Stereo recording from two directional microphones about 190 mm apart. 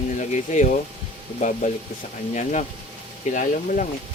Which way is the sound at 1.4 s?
40° left (ahead or behind).